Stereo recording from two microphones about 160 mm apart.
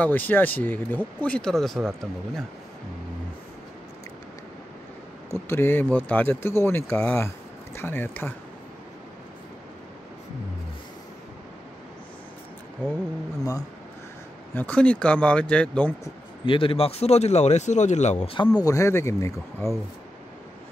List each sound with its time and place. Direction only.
0.0 s speech: 10° left (ahead or behind)
5.3 s speech: 15° left (ahead or behind)
13.4 s speech: 20° left (ahead or behind)
14.5 s speech: 10° left (ahead or behind)
16.4 s speech: 35° left (ahead or behind)
18.6 s speech: 20° left (ahead or behind)